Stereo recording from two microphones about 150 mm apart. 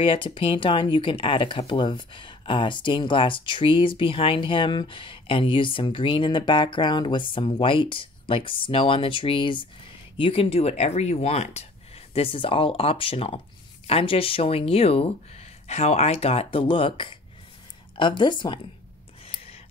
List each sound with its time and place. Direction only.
0.0 s speech: 35° left (ahead or behind)